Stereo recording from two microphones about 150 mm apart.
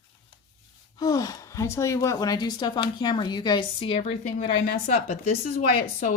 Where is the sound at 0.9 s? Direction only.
25° left (ahead or behind); by 5.5 s 45° left (ahead or behind).